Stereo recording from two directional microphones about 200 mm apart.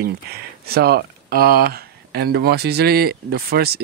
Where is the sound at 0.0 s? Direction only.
50° right (ahead or behind).